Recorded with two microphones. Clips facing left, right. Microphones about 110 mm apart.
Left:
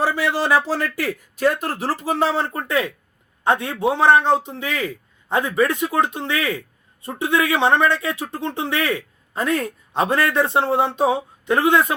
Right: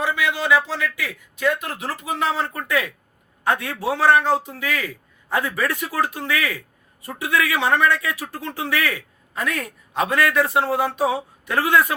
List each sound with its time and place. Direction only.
0.0 s speech: 35° left (ahead or behind)
1.4 s a man's voice: 35° left (ahead or behind)